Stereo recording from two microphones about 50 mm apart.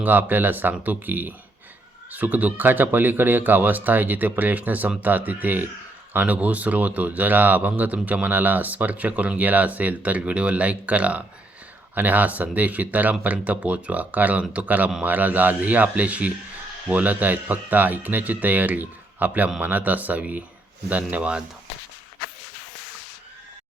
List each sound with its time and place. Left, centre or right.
0.0 s speech: right
11.9 s speech: right